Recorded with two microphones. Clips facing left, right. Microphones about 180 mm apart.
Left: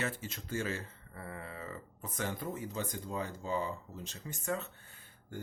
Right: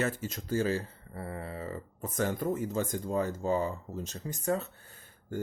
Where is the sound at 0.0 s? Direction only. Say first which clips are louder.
Right 6 dB; 40° right (ahead or behind).